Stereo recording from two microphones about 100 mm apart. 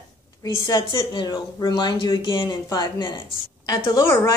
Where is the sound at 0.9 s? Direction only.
55° left (ahead or behind).